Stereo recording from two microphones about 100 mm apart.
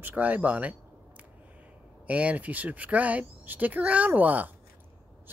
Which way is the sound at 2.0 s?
15° right (ahead or behind).